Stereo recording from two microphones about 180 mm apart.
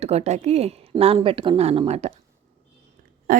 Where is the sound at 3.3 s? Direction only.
50° right (ahead or behind).